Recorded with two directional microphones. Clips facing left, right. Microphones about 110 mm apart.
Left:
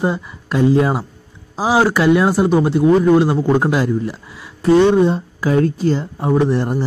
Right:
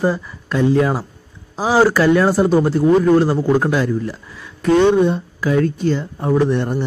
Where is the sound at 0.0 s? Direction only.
25° left (ahead or behind).